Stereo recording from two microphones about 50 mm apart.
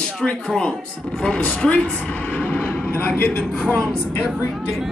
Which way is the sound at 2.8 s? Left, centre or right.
Left.